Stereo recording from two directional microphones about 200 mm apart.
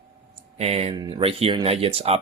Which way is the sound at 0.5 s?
30° right (ahead or behind).